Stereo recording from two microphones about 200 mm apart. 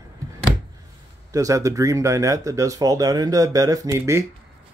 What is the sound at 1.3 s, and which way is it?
Speech, 15° right (ahead or behind).